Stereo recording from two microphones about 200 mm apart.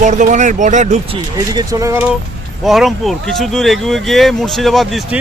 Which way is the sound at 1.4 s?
15° right (ahead or behind).